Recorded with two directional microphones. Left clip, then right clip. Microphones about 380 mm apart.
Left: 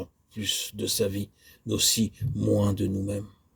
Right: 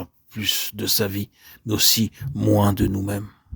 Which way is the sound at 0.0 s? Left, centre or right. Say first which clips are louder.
Right 6 dB; right.